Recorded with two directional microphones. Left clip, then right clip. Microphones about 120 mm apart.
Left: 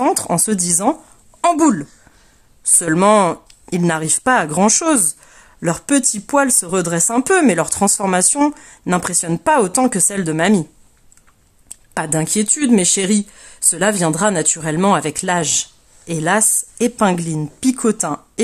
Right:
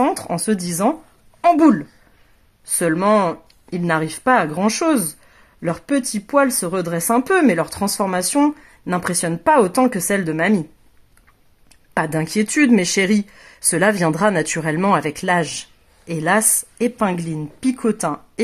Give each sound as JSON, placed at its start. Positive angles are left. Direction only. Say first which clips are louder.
{"t": 0.0, "sound": "speech", "louder": "left 2 dB", "side_deg": 40}
{"t": 11.9, "sound": "speech", "louder": "even", "side_deg": 25}